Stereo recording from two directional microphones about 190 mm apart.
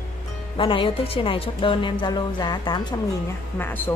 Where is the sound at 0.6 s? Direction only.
30° left (ahead or behind).